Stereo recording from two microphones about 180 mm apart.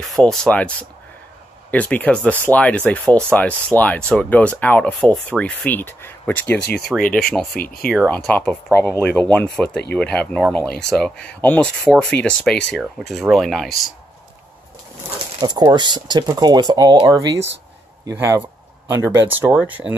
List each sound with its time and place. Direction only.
0.0 s speech: centre (ahead or behind)
1.7 s speech: 10° left (ahead or behind)
6.6 s speech: 60° left (ahead or behind)
7.2 s speech: 5° left (ahead or behind)
7.5 s speech: 55° left (ahead or behind)
8.1 s speech: 10° left (ahead or behind)
15.4 s speech: 25° right (ahead or behind); by 19.9 s 10° right (ahead or behind)